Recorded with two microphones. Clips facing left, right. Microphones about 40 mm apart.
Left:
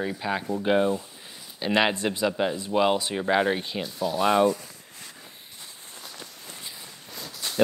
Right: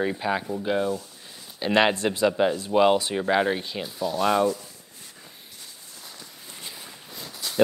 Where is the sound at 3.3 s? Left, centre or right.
Centre.